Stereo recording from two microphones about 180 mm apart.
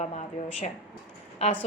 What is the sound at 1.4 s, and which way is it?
Speech, 35° left (ahead or behind).